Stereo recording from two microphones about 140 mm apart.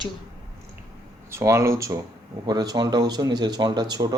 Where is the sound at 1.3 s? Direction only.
20° right (ahead or behind).